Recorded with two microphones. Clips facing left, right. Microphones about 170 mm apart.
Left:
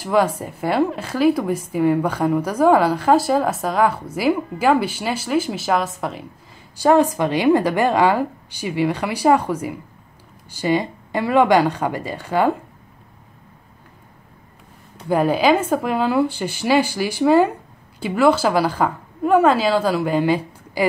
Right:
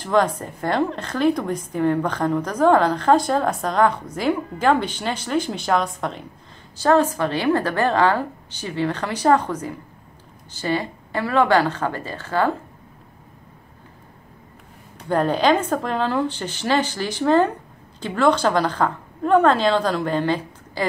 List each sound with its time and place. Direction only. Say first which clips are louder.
0.0 s a woman's voice: left 1 dB; 10° left (ahead or behind)
6.8 s a woman's voice: left 2 dB; 15° left (ahead or behind)
15.0 s a woman's voice: left 2 dB; 10° left (ahead or behind)